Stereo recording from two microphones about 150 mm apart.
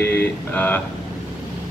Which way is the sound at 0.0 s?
10° left (ahead or behind).